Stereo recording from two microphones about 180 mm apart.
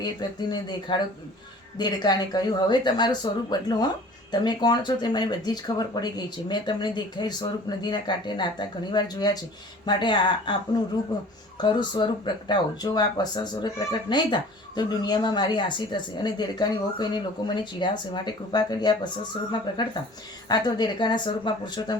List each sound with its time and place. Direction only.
0.0 s speech: 25° left (ahead or behind)